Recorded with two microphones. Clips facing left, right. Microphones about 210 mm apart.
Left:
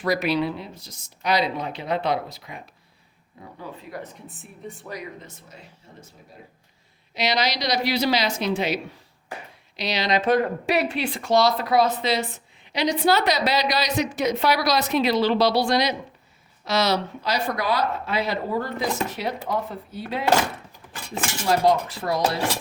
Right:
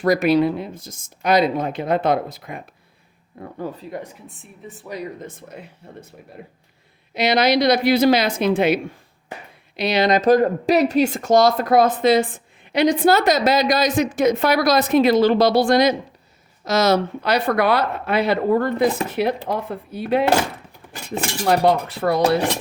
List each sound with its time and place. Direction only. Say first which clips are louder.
0.0 s speech: right 7 dB; 50° right (ahead or behind)
3.9 s speech: even; 20° right (ahead or behind)
4.3 s a woman's voice: left 1 dB; centre (ahead or behind)
5.2 s speech: right 9 dB; 55° right (ahead or behind)
7.1 s speech: right 7 dB; 55° right (ahead or behind)
21.4 s speech: right 3 dB; 60° right (ahead or behind)